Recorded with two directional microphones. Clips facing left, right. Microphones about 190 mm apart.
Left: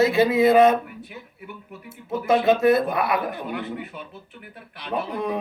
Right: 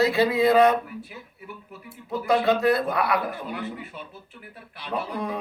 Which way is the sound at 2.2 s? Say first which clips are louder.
Left 3 dB; 20° left (ahead or behind).